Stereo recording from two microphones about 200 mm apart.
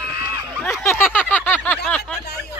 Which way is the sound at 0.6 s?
10° left (ahead or behind).